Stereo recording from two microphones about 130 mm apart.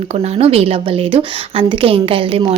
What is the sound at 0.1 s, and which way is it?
A woman's voice, 55° right (ahead or behind).